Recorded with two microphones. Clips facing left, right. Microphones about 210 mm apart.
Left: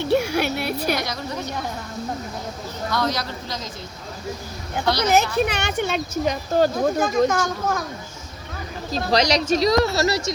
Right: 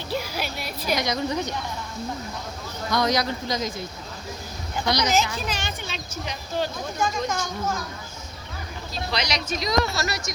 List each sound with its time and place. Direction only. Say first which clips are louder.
0.0 s a sound: left 9 dB; 65° left (ahead or behind)
0.9 s a woman's voice: right 2 dB; 20° right (ahead or behind)
2.9 s speech: right 2 dB; 15° right (ahead or behind)
5.0 s a woman's voice: left 5 dB; 60° left (ahead or behind)
6.2 s a woman's voice: left 8 dB; 45° left (ahead or behind); by 7.8 s 60° left (ahead or behind)
9.0 s speech: left 9 dB; 40° left (ahead or behind)